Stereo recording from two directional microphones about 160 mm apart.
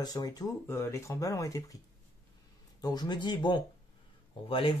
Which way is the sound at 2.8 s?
25° left (ahead or behind).